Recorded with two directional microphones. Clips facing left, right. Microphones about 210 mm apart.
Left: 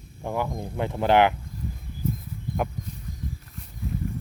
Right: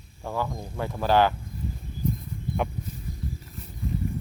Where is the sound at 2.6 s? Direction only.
5° left (ahead or behind).